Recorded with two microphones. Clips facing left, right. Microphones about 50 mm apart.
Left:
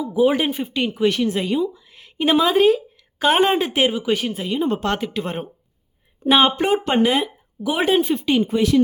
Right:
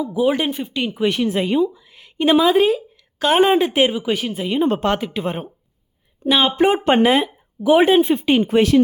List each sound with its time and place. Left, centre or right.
0.0 s speech: centre
1.0 s a woman's voice: centre
1.7 s a woman's voice: centre
6.2 s speech: centre
6.6 s speech: right
8.2 s speech: right
8.4 s speech: right